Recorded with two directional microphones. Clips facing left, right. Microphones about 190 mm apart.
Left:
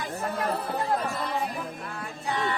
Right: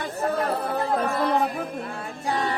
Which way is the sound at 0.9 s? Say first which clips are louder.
Right 6 dB; 55° right (ahead or behind).